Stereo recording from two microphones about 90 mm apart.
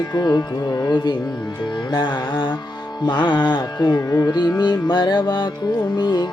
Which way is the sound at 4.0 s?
40° left (ahead or behind).